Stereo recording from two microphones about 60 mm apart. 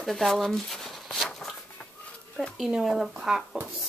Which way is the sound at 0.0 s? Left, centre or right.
Centre.